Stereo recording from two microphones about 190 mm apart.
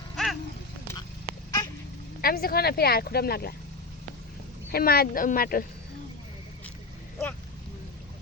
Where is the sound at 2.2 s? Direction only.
50° left (ahead or behind).